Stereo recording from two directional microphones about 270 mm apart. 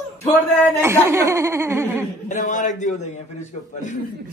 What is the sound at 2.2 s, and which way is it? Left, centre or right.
Speech, left.